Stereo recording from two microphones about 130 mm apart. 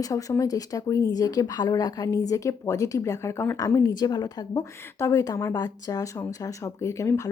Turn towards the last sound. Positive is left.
turn(degrees=25)  # may be behind; listen again after turning